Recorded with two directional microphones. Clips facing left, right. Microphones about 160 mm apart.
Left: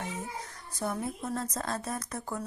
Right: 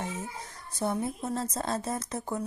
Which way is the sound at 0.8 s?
25° right (ahead or behind).